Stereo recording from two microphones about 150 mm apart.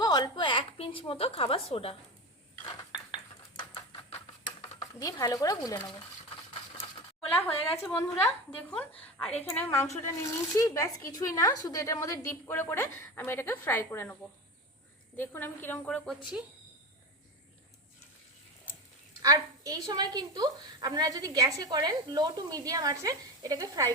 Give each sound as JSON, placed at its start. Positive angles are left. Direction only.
{"t": 0.0, "sound": "a sound", "side_deg": 25}
{"t": 4.8, "sound": "speech", "side_deg": 25}
{"t": 7.3, "sound": "a woman's voice", "side_deg": 10}
{"t": 9.4, "sound": "a woman's voice", "side_deg": 15}
{"t": 19.2, "sound": "a woman's voice", "side_deg": -25}